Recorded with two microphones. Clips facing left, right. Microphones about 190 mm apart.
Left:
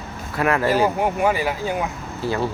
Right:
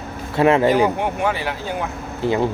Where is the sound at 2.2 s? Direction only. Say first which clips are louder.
Right 4 dB; 20° right (ahead or behind).